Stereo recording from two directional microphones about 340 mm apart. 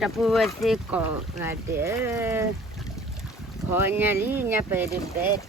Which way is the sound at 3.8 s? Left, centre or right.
Centre.